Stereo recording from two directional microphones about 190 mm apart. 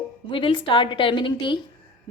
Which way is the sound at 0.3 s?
25° left (ahead or behind).